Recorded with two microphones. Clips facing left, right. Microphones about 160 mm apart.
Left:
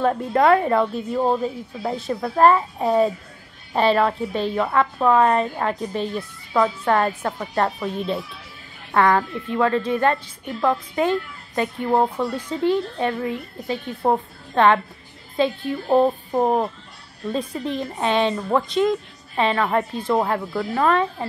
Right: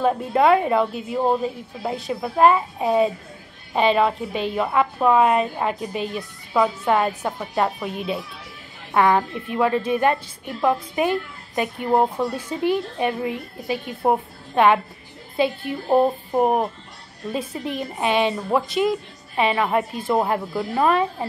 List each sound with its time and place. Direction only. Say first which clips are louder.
0.0 s a woman's voice: even; 15° right (ahead or behind)